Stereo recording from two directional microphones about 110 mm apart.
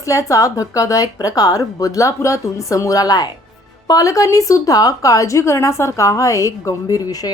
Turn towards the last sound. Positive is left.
turn(degrees=35)  # may be behind; listen again after turning